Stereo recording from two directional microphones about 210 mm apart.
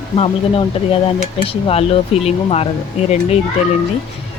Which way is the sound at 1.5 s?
25° left (ahead or behind).